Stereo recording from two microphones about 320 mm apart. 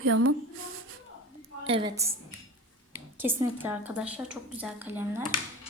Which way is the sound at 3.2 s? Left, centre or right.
Centre.